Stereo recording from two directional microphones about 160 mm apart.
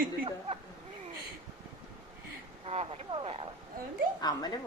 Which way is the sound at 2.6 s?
40° right (ahead or behind).